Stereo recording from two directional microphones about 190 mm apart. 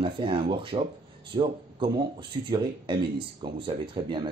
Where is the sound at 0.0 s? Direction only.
25° right (ahead or behind).